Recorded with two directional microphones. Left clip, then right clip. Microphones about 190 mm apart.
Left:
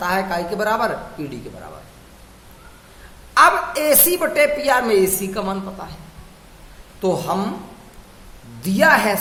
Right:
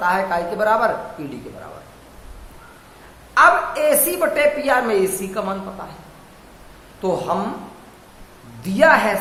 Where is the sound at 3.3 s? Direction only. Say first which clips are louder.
Even; 35° left (ahead or behind).